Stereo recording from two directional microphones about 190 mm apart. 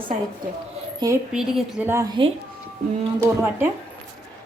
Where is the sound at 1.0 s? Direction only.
20° right (ahead or behind).